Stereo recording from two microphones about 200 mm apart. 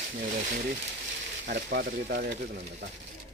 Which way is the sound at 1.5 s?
55° right (ahead or behind).